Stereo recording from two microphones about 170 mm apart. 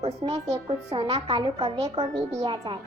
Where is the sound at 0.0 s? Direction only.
35° right (ahead or behind).